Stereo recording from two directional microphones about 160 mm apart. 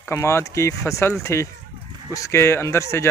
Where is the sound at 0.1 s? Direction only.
15° left (ahead or behind).